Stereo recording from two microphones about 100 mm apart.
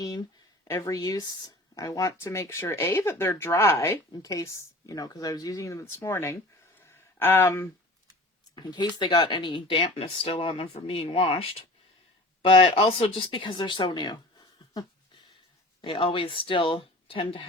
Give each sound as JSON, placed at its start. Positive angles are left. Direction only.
{"t": 0.6, "sound": "speech", "side_deg": 30}
{"t": 4.1, "sound": "speech", "side_deg": 35}
{"t": 8.5, "sound": "speech", "side_deg": 45}
{"t": 15.8, "sound": "speech", "side_deg": 60}